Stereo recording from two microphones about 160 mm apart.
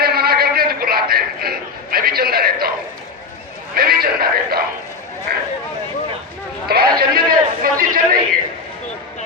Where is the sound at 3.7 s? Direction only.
70° right (ahead or behind).